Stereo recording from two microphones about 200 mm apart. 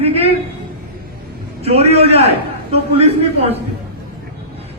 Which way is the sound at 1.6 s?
30° right (ahead or behind).